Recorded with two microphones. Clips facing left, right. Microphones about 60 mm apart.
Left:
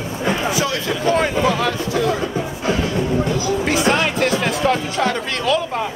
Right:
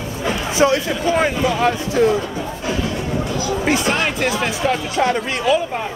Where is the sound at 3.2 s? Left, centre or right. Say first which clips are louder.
Left 2 dB; left.